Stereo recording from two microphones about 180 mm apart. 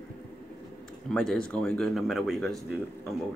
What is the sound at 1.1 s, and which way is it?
Speech, 5° left (ahead or behind).